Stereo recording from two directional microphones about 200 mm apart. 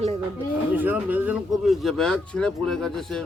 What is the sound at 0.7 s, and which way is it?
Speech, 10° right (ahead or behind).